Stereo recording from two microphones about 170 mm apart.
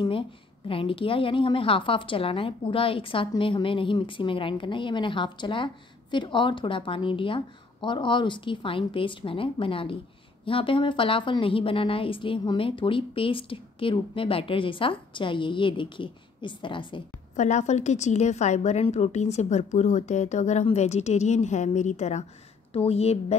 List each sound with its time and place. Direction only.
0.7 s a woman's voice: 30° left (ahead or behind)
17.4 s a woman's voice: 45° left (ahead or behind)